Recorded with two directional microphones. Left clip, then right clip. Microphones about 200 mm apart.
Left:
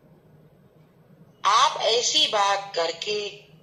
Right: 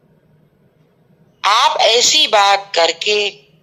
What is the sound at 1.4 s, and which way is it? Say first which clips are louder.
A man's voice: right 8 dB; 40° right (ahead or behind).